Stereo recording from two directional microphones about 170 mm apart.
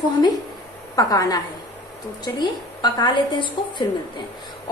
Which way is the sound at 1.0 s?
20° left (ahead or behind).